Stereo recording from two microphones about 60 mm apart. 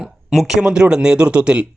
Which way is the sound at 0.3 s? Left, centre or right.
Centre.